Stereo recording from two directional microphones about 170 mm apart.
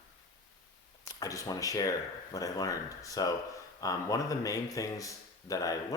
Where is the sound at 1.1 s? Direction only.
20° left (ahead or behind).